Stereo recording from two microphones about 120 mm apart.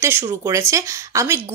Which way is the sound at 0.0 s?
25° right (ahead or behind).